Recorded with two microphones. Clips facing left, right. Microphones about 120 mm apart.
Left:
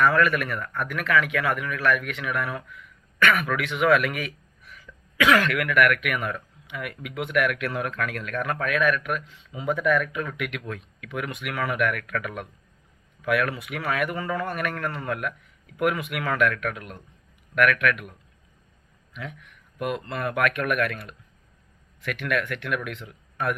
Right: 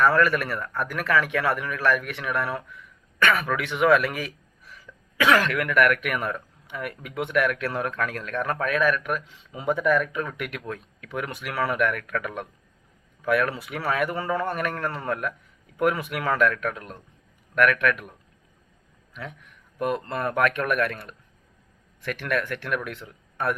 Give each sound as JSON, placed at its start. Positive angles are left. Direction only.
{"t": 0.0, "sound": "a man's voice", "side_deg": -35}
{"t": 9.6, "sound": "speech", "side_deg": 0}
{"t": 10.1, "sound": "a man's voice", "side_deg": -35}
{"t": 19.8, "sound": "a man's voice", "side_deg": -35}